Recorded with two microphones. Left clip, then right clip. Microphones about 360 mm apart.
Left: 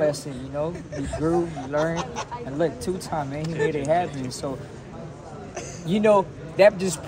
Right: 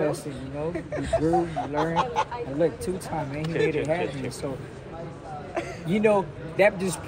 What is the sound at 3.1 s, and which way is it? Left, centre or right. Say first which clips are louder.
Speech: right 1 dB; centre.